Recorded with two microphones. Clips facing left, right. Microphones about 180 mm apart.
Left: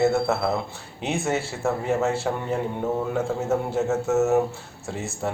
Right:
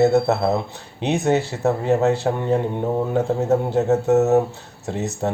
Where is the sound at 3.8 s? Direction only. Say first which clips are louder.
Right 4 dB; 35° right (ahead or behind).